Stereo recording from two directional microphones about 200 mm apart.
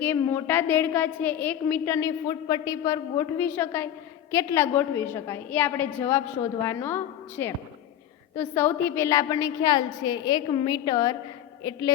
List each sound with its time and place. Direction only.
0.0 s a woman's voice: 10° left (ahead or behind)